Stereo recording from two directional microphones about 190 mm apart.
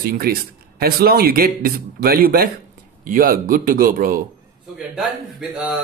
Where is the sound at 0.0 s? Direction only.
50° right (ahead or behind).